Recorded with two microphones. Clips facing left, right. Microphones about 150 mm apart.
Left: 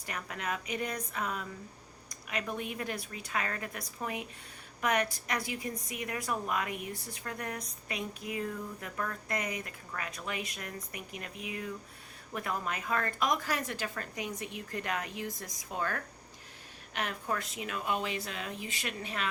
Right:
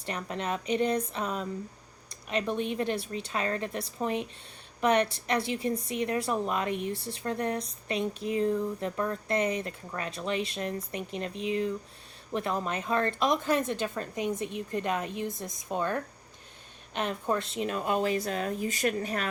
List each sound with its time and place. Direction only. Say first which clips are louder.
0.0 s a woman's voice: right 5 dB; 25° right (ahead or behind); by 19.3 s 45° right (ahead or behind)